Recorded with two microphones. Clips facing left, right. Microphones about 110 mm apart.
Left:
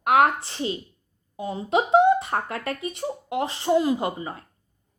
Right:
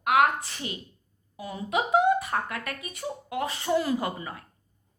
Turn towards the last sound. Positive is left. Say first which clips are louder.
# left 4 dB
turn(degrees=25)  # may be behind; listen again after turning